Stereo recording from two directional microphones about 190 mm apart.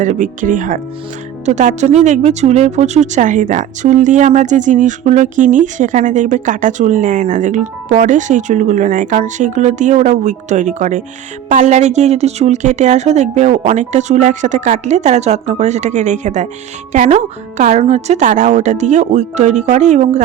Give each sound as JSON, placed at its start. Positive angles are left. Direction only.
{"t": 0.0, "sound": "speech", "side_deg": -40}